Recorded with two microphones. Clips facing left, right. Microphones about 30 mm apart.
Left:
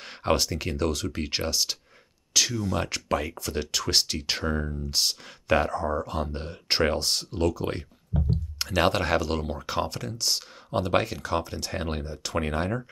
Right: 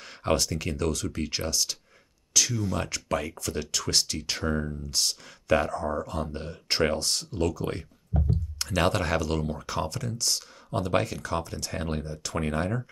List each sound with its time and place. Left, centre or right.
0.0 s speech: left
2.5 s speech: centre
2.8 s speech: centre